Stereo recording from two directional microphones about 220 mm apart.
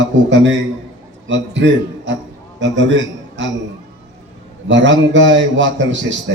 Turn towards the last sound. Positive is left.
turn(degrees=-55)  # may be behind; listen again after turning